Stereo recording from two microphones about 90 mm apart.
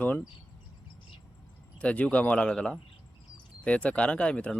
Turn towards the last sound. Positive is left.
turn(degrees=10)  # may be behind; listen again after turning